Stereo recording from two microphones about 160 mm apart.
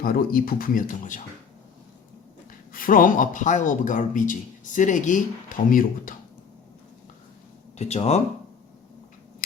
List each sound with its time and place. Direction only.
0.0 s speech: 65° left (ahead or behind)
2.7 s a man's voice: 60° left (ahead or behind)
7.8 s a man's voice: 45° left (ahead or behind)